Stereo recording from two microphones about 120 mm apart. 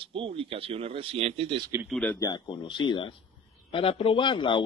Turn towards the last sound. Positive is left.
turn(degrees=40)  # may be behind; listen again after turning